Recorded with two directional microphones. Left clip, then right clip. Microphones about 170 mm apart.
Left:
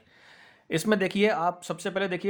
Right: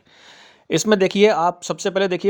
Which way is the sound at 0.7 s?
40° right (ahead or behind).